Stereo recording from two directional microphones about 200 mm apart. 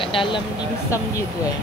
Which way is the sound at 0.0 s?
25° left (ahead or behind).